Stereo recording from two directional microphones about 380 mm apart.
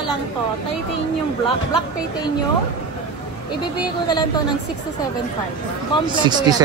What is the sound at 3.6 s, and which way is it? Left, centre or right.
Speech, centre.